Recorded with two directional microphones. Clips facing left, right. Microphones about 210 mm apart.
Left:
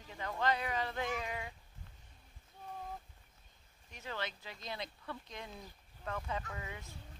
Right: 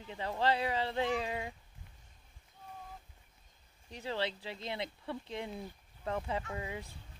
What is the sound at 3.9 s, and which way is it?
Speech, 30° right (ahead or behind).